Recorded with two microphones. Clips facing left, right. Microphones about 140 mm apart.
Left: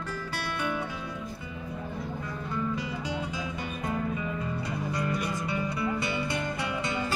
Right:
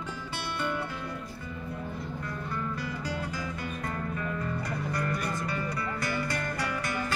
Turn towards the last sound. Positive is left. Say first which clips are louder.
# left 1 dB
turn(degrees=20)  # may be behind; listen again after turning